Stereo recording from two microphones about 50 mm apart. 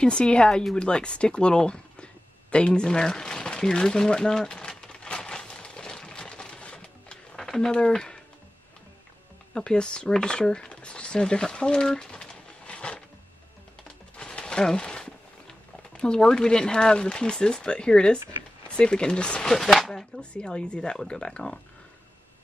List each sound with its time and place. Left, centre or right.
0.0 s speech: centre
2.5 s a sound: centre
7.4 s speech: centre
9.5 s speech: centre
14.1 s a sound: centre
16.0 s speech: centre
19.4 s speech: centre
20.2 s speech: centre